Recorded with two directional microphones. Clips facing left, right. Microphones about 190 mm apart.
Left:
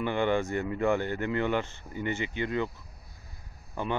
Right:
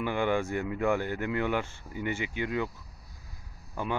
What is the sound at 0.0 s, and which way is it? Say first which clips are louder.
Speech: left 1 dB; 10° right (ahead or behind).